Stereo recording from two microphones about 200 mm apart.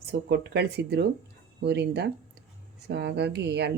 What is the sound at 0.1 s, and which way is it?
Speech, 55° right (ahead or behind).